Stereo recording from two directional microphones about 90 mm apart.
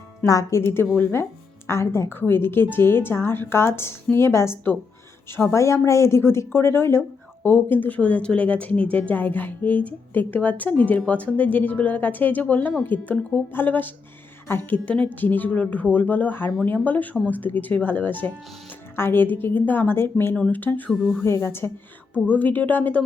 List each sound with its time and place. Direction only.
0.3 s speech: 40° left (ahead or behind)
0.6 s a woman's voice: 25° left (ahead or behind)
14.8 s speech: 15° left (ahead or behind)
20.9 s speech: 5° left (ahead or behind)
21.2 s speech: 30° left (ahead or behind)
22.1 s speech: 15° left (ahead or behind)